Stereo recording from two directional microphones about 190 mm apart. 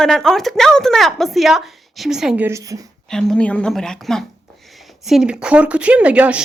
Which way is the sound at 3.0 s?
5° left (ahead or behind).